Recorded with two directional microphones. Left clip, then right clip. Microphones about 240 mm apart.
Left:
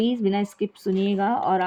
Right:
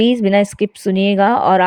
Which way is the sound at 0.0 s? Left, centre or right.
Right.